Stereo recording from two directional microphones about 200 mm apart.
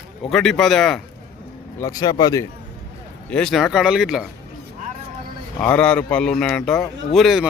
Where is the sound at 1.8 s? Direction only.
20° left (ahead or behind).